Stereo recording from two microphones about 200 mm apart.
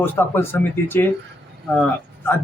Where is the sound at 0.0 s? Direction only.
10° left (ahead or behind).